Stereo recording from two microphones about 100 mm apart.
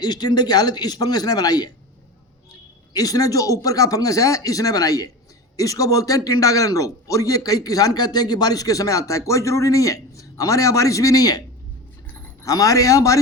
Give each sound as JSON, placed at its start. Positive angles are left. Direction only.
{"t": 0.0, "sound": "a man's voice", "side_deg": 45}
{"t": 2.9, "sound": "a man's voice", "side_deg": 40}